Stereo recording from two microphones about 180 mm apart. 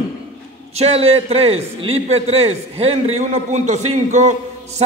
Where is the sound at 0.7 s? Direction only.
35° right (ahead or behind).